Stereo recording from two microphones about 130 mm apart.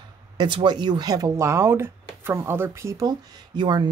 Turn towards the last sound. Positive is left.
turn(degrees=-35)  # may be behind; listen again after turning